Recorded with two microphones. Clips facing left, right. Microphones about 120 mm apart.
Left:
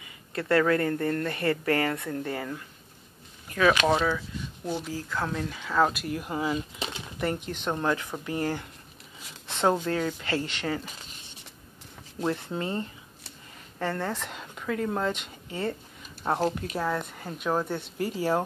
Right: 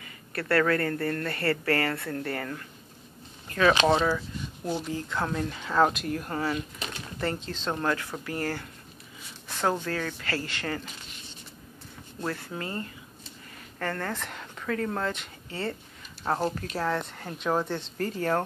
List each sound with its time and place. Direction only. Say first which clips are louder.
0.0 s speech: left 1 dB; 20° left (ahead or behind)
3.4 s a sound: even; 5° left (ahead or behind)
4.6 s speech: right 1 dB; centre (ahead or behind)
6.1 s speech: left 1 dB; 10° left (ahead or behind)
12.3 s speech: left 4 dB; 20° left (ahead or behind)